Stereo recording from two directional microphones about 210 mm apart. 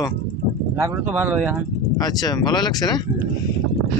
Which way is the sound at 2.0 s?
20° left (ahead or behind).